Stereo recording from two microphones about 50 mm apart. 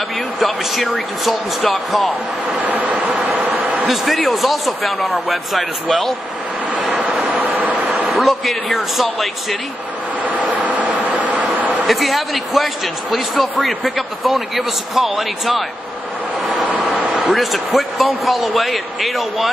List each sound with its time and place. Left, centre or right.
0.4 s speech: centre
2.6 s vehicle: right
3.9 s speech: centre
7.2 s vehicle: right
8.1 s speech: centre
10.2 s vehicle: right
11.8 s speech: centre
16.6 s vehicle: right
17.1 s speech: centre